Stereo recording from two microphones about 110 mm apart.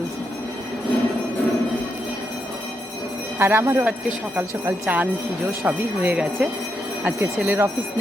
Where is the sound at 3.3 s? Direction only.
20° right (ahead or behind).